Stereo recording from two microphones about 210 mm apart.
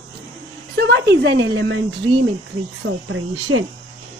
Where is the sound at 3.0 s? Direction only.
80° right.